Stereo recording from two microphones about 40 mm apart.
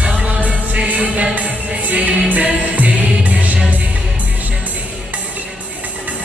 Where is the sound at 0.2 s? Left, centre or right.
Right.